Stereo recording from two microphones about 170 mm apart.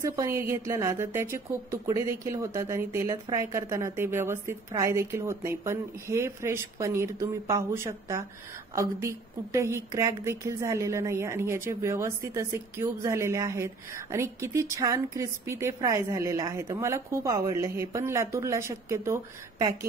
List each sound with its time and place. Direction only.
0.0 s a woman's voice: 15° right (ahead or behind)